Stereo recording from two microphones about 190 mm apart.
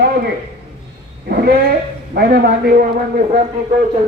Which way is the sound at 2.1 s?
50° right (ahead or behind).